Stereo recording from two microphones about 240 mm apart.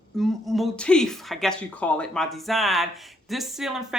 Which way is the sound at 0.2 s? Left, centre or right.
Centre.